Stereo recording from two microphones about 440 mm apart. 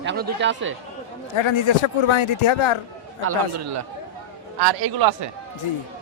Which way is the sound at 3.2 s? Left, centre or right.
Right.